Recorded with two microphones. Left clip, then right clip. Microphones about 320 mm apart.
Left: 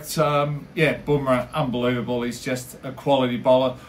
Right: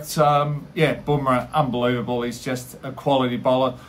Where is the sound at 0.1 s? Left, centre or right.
Centre.